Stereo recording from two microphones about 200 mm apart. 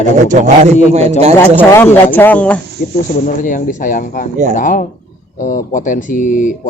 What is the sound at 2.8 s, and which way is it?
Speech, 40° left (ahead or behind).